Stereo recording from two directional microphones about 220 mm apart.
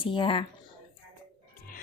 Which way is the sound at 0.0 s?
20° left (ahead or behind).